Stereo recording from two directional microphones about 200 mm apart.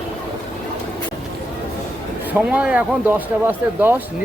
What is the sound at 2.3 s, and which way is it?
Speech, 5° right (ahead or behind).